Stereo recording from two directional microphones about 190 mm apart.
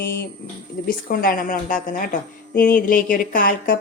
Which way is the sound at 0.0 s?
55° left (ahead or behind).